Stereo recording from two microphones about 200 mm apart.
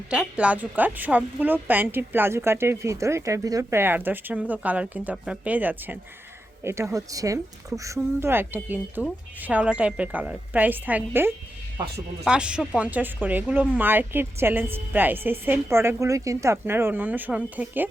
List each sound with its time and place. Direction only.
0.1 s a woman's voice: 5° right (ahead or behind)